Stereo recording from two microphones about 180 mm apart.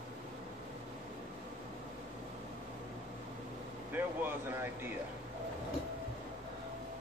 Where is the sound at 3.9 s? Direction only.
10° right (ahead or behind).